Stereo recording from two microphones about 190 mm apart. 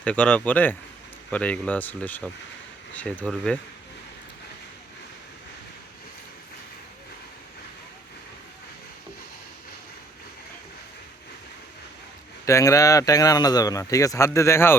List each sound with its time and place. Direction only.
0.0 s speech: 5° left (ahead or behind)
12.5 s speech: 15° left (ahead or behind)